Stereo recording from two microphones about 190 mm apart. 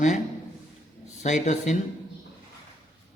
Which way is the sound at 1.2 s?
40° left (ahead or behind).